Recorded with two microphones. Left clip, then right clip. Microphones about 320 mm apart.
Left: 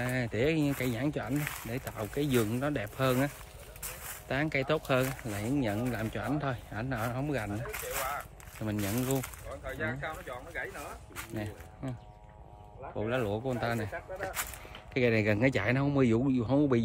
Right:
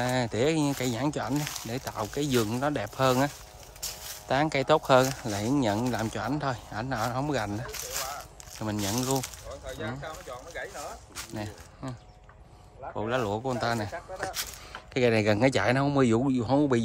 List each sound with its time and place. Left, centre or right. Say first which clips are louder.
0.0 s speech: right 4 dB; centre
4.3 s speech: right 7 dB; centre
9.7 s speech: left 1 dB; centre
11.1 s a sound: even; centre
12.9 s speech: right 3 dB; centre